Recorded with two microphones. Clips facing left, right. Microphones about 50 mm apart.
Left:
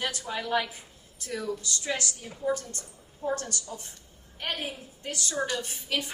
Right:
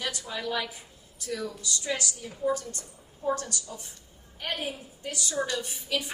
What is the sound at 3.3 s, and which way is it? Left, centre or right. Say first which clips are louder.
Speech: right 2 dB; left.